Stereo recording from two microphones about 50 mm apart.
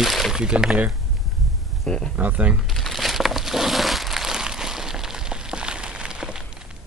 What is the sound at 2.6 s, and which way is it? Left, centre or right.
Crumpling, centre.